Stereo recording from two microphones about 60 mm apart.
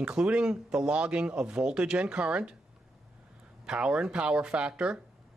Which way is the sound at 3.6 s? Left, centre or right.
Centre.